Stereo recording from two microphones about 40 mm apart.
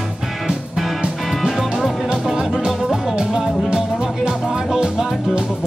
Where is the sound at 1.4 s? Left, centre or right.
Centre.